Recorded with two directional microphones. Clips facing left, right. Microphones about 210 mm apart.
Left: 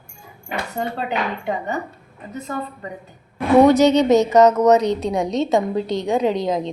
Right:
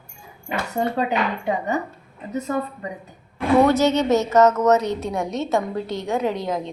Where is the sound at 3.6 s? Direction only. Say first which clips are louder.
Left 6 dB; 15° left (ahead or behind).